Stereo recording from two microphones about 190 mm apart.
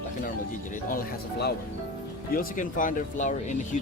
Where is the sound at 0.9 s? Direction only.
50° left (ahead or behind).